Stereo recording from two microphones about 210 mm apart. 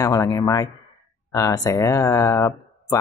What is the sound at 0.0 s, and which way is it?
Speech, 15° left (ahead or behind).